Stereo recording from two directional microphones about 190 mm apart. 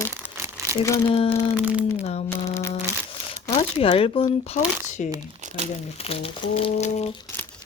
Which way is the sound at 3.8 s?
30° left (ahead or behind).